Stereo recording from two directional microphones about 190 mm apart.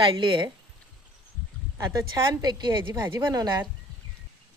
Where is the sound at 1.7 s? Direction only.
20° right (ahead or behind).